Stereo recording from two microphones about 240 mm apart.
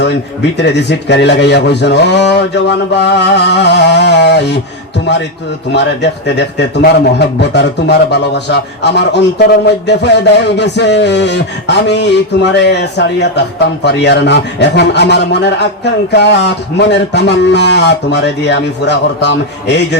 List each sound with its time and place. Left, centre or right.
0.5 s a man's voice: left
5.7 s a man's voice: left